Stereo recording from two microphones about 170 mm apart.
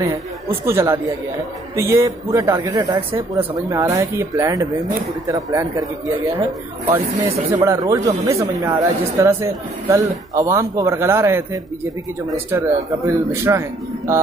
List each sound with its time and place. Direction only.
0.7 s a man's voice: 15° right (ahead or behind)
7.5 s a man's voice: 15° right (ahead or behind)